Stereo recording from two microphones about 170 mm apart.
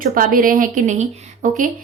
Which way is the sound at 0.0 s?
55° right (ahead or behind).